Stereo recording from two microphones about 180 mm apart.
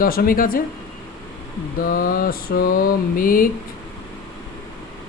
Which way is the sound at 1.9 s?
50° left (ahead or behind).